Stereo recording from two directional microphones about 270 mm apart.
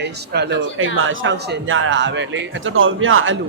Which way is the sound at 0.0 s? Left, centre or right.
Right.